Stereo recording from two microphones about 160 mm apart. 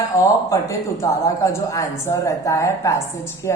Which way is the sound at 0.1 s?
20° left (ahead or behind).